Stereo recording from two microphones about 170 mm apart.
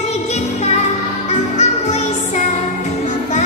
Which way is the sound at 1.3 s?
40° left (ahead or behind).